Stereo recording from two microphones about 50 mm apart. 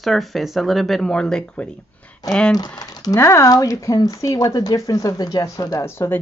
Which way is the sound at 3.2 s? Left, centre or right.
Left.